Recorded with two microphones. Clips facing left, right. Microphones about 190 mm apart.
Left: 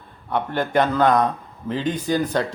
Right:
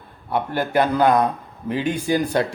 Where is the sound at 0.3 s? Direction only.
10° right (ahead or behind).